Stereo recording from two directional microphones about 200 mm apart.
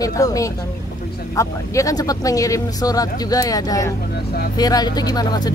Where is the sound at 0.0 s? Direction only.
15° left (ahead or behind).